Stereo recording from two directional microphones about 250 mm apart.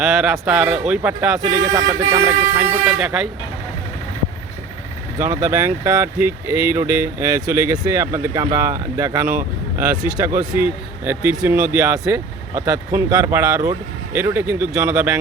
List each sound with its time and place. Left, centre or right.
0.0 s speech: centre
5.2 s speech: centre
9.2 s speech: right
9.7 s speech: centre